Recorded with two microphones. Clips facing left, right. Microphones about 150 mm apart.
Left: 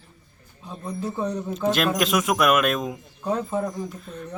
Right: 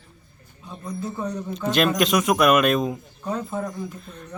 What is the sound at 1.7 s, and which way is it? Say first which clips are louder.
Speech: right 3 dB; centre (ahead or behind).